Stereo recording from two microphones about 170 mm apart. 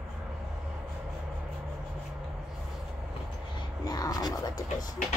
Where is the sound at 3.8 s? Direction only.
20° left (ahead or behind).